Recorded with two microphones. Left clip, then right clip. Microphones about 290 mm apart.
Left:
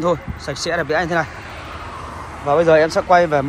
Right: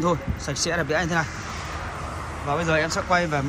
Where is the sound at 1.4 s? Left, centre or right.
Left.